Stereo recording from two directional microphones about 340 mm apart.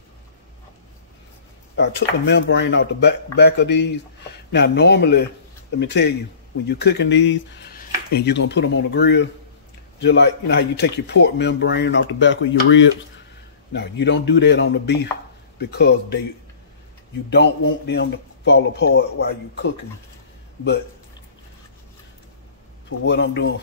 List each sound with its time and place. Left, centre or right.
1.8 s speech: left
17.3 s speech: left
22.8 s speech: left